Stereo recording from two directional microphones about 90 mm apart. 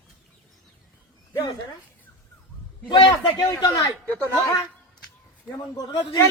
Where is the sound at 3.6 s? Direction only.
45° left (ahead or behind).